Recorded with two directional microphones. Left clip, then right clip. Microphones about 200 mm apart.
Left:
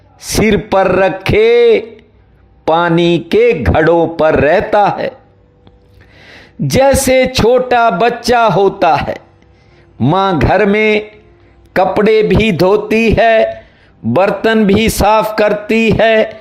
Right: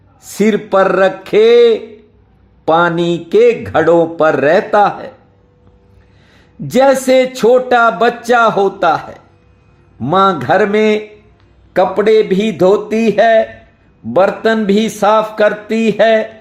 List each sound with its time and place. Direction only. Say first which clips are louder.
0.4 s speech: even; 30° left (ahead or behind)
6.2 s speech: left 8 dB; 30° left (ahead or behind)